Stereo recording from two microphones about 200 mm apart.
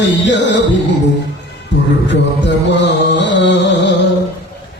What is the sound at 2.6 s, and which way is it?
Music, 60° left (ahead or behind).